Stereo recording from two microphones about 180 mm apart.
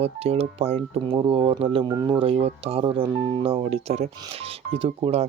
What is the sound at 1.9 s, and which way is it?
Speech, 20° right (ahead or behind).